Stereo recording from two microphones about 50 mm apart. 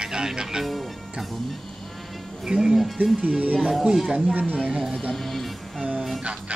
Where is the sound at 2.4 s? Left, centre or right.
Centre.